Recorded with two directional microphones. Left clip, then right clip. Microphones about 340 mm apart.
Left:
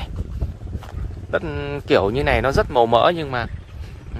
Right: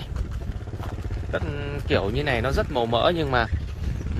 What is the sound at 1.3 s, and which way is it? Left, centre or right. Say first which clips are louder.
Speech: left 6 dB; centre.